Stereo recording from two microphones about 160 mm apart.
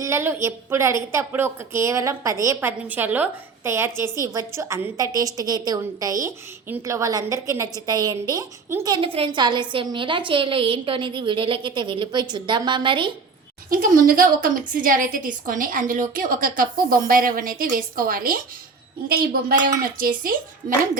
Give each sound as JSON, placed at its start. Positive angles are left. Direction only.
{"t": 0.0, "sound": "a woman's voice", "side_deg": -15}
{"t": 13.7, "sound": "a woman's voice", "side_deg": -60}